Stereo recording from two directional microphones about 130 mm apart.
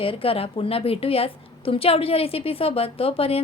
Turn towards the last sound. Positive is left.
turn(degrees=45)  # may be behind; listen again after turning